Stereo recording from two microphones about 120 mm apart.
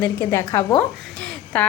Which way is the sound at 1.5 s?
10° left (ahead or behind).